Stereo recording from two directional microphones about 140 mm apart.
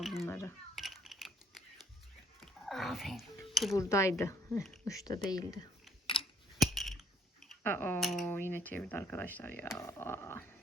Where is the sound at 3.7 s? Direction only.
20° left (ahead or behind).